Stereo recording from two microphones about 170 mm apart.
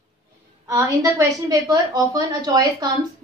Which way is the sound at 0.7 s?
20° right (ahead or behind).